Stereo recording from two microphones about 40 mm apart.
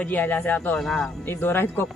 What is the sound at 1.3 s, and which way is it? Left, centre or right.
Speech, left.